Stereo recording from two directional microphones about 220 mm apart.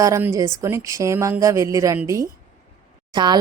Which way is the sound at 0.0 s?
10° right (ahead or behind).